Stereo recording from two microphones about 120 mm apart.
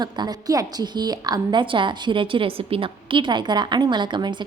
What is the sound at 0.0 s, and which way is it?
A woman's voice, 35° right (ahead or behind).